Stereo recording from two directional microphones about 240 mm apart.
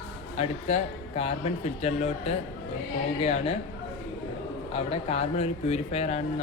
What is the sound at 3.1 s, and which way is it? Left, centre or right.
Speech, left.